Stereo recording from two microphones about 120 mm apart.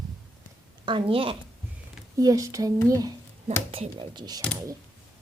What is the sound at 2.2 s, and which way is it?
Speech, 30° right (ahead or behind).